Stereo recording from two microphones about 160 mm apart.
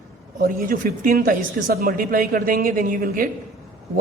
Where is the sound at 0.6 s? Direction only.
55° right (ahead or behind).